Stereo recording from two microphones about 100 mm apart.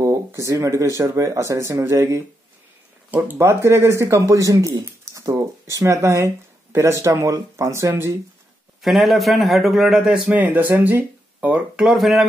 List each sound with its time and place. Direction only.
0.0 s speech: 30° right (ahead or behind)
8.8 s a man's voice: centre (ahead or behind)
10.3 s speech: 15° right (ahead or behind)
11.8 s a man's voice: centre (ahead or behind)